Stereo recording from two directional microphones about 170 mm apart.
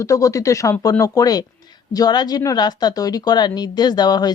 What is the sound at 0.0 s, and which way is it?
A woman's voice, 20° left (ahead or behind).